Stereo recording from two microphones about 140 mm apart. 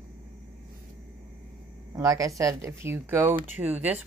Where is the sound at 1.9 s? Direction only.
25° right (ahead or behind).